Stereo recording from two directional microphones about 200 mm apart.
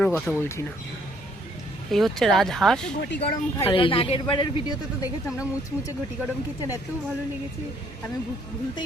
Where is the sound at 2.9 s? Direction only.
60° left (ahead or behind).